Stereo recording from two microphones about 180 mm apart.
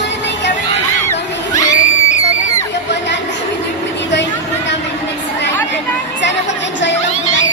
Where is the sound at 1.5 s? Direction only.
20° left (ahead or behind).